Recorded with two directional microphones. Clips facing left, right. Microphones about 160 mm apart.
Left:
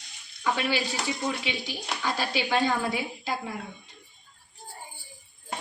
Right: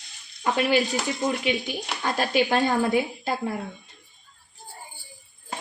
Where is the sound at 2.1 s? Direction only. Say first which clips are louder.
Right 6 dB; 50° right (ahead or behind).